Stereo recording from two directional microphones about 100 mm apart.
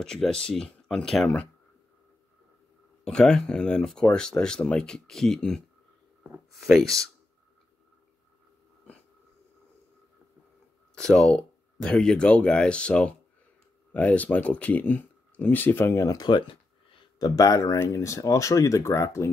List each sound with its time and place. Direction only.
0.0 s speech: 5° left (ahead or behind)
3.1 s speech: 5° left (ahead or behind)
6.6 s speech: centre (ahead or behind)
11.0 s speech: 5° left (ahead or behind); by 16.2 s 25° left (ahead or behind)
16.2 s speech: 45° left (ahead or behind)
17.2 s speech: 35° left (ahead or behind)